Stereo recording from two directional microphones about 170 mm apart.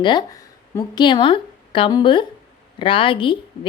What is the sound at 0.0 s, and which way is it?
A woman's voice, 25° left (ahead or behind).